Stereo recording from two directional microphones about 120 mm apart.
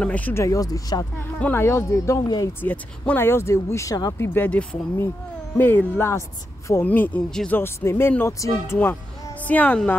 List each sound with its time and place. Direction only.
0.0 s speech: 10° left (ahead or behind); by 1.0 s 30° left (ahead or behind)
1.4 s speech: 20° left (ahead or behind)
2.6 s speech: 15° left (ahead or behind); by 4.3 s 30° left (ahead or behind)
4.3 s speech: 15° left (ahead or behind)
7.5 s speech: 20° left (ahead or behind)